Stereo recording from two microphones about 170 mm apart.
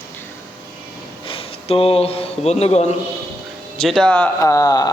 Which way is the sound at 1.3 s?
35° left (ahead or behind).